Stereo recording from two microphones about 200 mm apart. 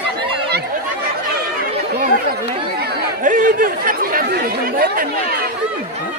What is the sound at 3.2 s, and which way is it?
Chatter, 40° right (ahead or behind).